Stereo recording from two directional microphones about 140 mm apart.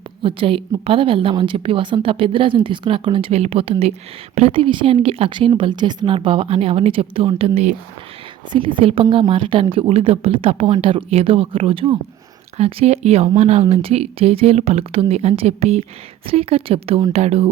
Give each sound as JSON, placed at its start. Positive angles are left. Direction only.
{"t": 0.2, "sound": "a woman's voice", "side_deg": -40}
{"t": 8.5, "sound": "a woman's voice", "side_deg": -40}